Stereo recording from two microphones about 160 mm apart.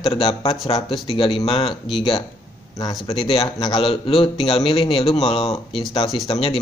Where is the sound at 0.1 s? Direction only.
35° left (ahead or behind).